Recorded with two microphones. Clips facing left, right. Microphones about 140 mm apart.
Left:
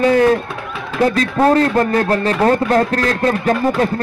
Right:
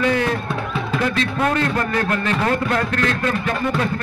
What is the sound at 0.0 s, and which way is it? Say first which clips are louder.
A man's voice: left 7 dB; 40° left (ahead or behind).